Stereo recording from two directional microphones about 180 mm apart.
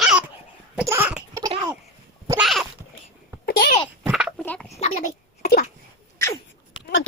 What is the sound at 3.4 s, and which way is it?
Babbling, 60° left (ahead or behind).